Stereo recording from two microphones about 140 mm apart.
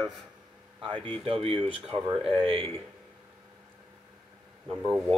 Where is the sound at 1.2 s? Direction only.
45° right (ahead or behind).